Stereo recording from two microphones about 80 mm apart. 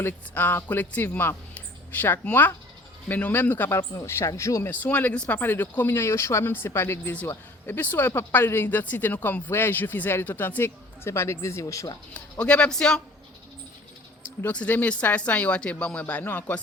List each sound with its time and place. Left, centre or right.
0.0 s speech: left
3.8 s speech: left
4.7 s speech: centre; by 11.9 s left
12.1 s speech: centre
14.4 s speech: centre